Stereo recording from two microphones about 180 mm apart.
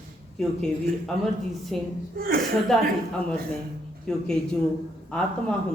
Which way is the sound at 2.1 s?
55° right (ahead or behind).